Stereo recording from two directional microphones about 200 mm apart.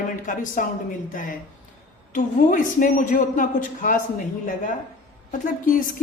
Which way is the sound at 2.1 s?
40° left (ahead or behind).